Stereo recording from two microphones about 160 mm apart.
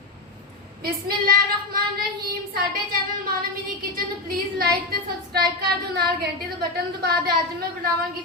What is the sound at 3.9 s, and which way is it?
Female singing, 65° right (ahead or behind).